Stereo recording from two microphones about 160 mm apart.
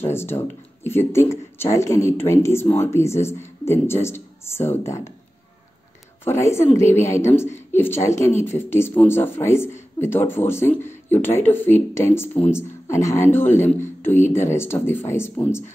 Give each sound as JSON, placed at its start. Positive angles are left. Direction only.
{"t": 0.0, "sound": "speech", "side_deg": 15}
{"t": 6.2, "sound": "speech", "side_deg": 15}